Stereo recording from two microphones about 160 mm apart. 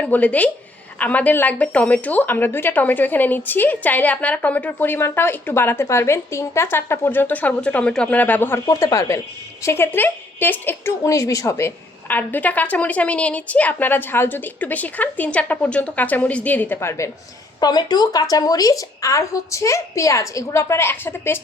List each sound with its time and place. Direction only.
0.0 s a woman's voice: 10° left (ahead or behind)
17.6 s a woman's voice: 25° left (ahead or behind)